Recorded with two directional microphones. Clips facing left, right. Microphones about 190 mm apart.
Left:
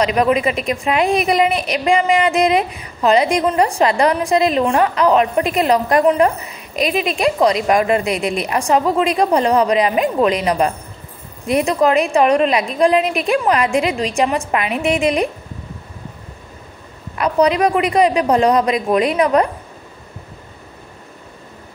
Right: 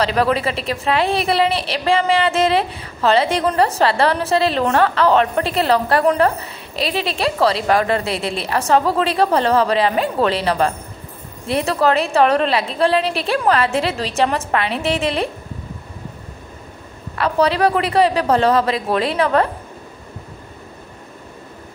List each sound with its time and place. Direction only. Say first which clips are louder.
0.0 s a woman's voice: left 2 dB; 15° left (ahead or behind)
0.5 s speech: left 3 dB; 30° right (ahead or behind)
0.8 s a woman's voice: left 2 dB; 15° left (ahead or behind)
1.5 s speech: left 2 dB; 30° right (ahead or behind)
2.1 s a woman's voice: left 2 dB; 15° left (ahead or behind)
6.7 s speech: left 3 dB; 30° right (ahead or behind)
7.2 s a woman's voice: left 2 dB; 15° left (ahead or behind)
8.0 s speech: left 3 dB; 30° right (ahead or behind)
8.3 s a woman's voice: right 1 dB; 15° left (ahead or behind)
13.0 s speech: left 2 dB; 30° right (ahead or behind)
13.4 s a woman's voice: right 2 dB; 15° left (ahead or behind)
17.1 s a woman's voice: left 2 dB; 15° left (ahead or behind)